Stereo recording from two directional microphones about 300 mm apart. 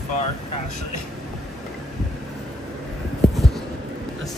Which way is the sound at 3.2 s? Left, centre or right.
Centre.